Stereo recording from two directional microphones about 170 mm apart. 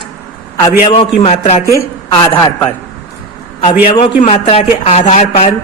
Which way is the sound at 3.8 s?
35° left (ahead or behind).